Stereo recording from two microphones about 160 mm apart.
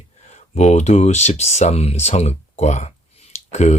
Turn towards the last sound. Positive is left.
turn(degrees=45)  # may be behind; listen again after turning